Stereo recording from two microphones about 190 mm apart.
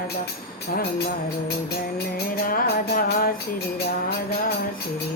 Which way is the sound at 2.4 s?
50° left (ahead or behind).